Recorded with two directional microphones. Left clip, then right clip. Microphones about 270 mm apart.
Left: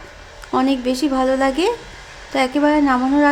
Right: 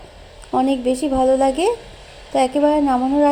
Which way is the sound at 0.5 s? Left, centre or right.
Left.